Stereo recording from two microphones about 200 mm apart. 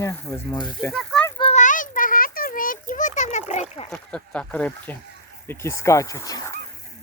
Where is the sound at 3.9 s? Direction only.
5° left (ahead or behind).